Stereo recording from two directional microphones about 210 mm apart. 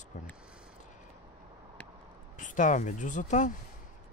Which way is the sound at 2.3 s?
35° left (ahead or behind).